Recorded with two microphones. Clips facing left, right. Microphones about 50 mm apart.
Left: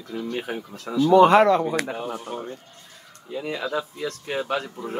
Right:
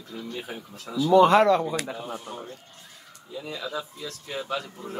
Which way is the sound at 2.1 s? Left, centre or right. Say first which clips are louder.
Left 4 dB; left.